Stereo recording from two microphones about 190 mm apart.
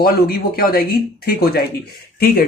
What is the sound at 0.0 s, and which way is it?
Speech, 50° left (ahead or behind).